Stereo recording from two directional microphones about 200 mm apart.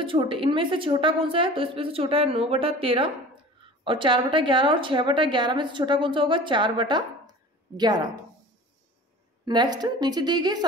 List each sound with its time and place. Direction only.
0.0 s a woman's voice: 25° right (ahead or behind)
9.5 s a woman's voice: 20° right (ahead or behind)